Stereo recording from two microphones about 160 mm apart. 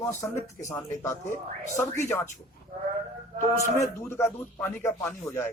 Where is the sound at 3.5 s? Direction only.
15° left (ahead or behind).